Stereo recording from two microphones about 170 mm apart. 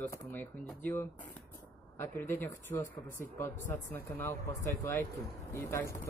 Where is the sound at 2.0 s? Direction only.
10° left (ahead or behind).